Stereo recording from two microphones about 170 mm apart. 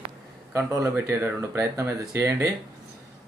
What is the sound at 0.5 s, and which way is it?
Speech, 15° right (ahead or behind).